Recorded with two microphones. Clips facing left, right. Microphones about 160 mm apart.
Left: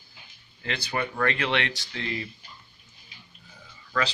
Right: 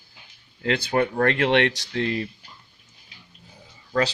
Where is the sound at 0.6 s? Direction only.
55° right (ahead or behind).